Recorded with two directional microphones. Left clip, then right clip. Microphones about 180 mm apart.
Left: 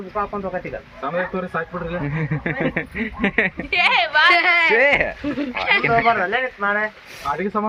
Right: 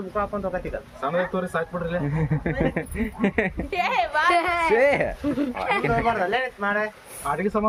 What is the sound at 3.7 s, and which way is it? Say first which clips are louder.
A woman's voice: left 8 dB; 50° right (ahead or behind).